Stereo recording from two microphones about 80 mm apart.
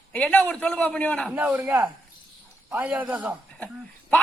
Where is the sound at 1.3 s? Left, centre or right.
Right.